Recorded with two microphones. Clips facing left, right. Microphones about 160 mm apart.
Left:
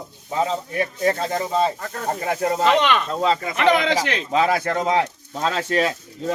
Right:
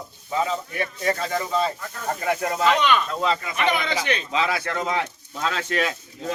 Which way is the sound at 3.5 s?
90° left.